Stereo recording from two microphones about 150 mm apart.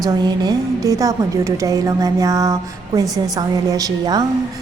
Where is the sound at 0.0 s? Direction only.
25° right (ahead or behind).